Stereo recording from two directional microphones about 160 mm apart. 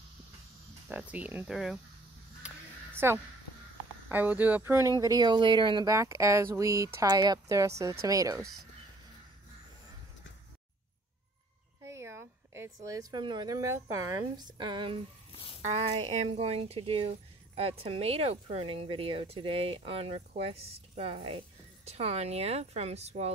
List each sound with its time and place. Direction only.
0.8 s speech: 10° right (ahead or behind)
2.4 s a sound: 15° right (ahead or behind)
4.1 s speech: 10° right (ahead or behind)
11.8 s a woman's voice: 15° right (ahead or behind)
15.3 s a sound: 35° left (ahead or behind)
15.9 s speech: 35° right (ahead or behind)